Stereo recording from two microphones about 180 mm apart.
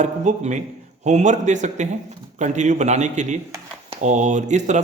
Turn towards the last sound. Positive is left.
turn(degrees=-40)  # may be behind; listen again after turning